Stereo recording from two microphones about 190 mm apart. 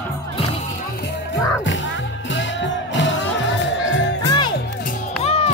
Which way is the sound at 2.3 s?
75° left (ahead or behind).